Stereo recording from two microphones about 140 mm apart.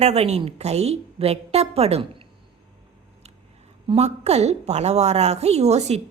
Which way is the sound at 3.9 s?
50° right (ahead or behind).